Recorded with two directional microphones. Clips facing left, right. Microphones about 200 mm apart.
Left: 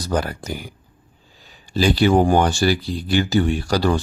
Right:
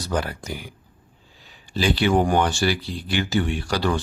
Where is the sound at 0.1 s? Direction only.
40° left (ahead or behind).